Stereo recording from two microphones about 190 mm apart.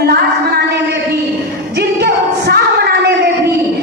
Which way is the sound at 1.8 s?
55° right (ahead or behind).